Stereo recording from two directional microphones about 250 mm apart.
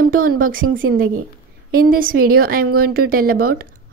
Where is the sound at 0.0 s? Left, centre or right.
Right.